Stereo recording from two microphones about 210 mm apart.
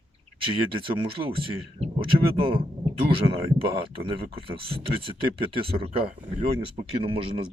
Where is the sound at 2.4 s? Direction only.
25° right (ahead or behind).